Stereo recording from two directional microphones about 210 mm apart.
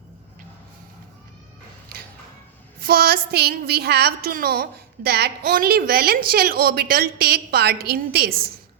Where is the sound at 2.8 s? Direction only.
45° right (ahead or behind).